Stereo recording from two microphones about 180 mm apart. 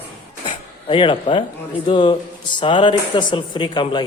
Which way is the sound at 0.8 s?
30° left (ahead or behind).